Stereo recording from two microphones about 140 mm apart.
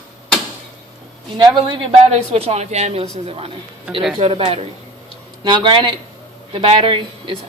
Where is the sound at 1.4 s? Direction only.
35° right (ahead or behind).